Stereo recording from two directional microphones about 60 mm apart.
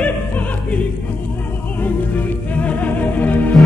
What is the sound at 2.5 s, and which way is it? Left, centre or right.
Music, left.